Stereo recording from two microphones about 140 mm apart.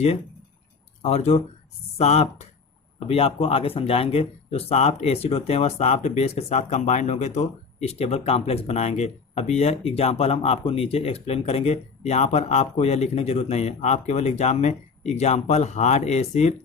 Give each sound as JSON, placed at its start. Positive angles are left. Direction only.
{"t": 1.0, "sound": "speech", "side_deg": 50}